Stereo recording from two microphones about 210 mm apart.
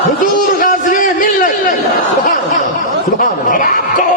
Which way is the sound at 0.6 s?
40° left (ahead or behind).